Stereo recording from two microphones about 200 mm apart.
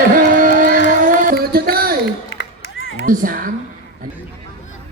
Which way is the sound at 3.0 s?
45° right (ahead or behind).